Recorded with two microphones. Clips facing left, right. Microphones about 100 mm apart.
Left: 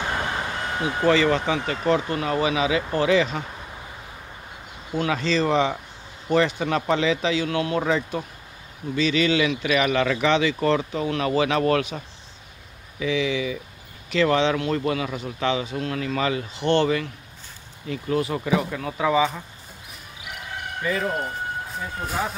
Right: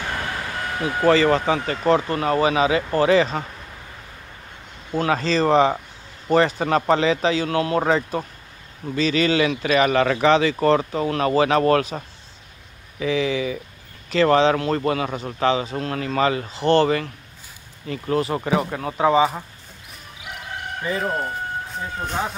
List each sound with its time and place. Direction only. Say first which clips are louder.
0.0 s vehicle: left 1 dB; 20° left (ahead or behind)
1.0 s speech: right 3 dB; 40° right (ahead or behind)
4.9 s speech: right 2 dB; 40° right (ahead or behind)
13.0 s speech: right 2 dB; 40° right (ahead or behind)
20.8 s speech: right 1 dB; 30° right (ahead or behind)
22.0 s speech: right 1 dB; 5° left (ahead or behind)